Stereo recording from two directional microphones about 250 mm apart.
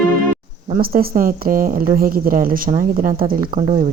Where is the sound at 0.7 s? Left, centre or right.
Right.